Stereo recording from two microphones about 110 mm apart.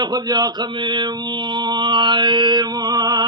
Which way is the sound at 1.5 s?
45° right (ahead or behind).